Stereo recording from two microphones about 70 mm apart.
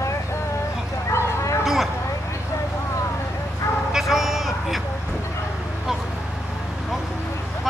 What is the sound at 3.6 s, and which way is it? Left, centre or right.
Bow-wow, left.